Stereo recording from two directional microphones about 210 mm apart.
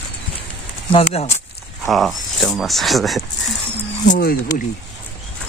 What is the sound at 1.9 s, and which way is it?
Speech, centre (ahead or behind).